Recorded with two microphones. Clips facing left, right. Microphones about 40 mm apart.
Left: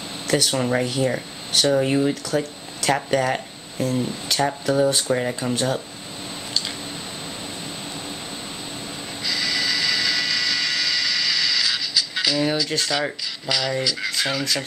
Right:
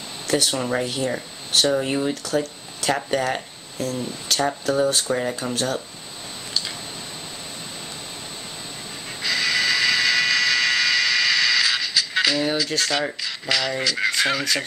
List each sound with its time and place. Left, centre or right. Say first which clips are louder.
0.3 s speech: left 1 dB; centre
3.7 s speech: left 3 dB; centre
5.5 s speech: left 4 dB; centre
9.2 s a sound: right 3 dB; centre
13.2 s speech: right 1 dB; centre
13.8 s speech: right 3 dB; right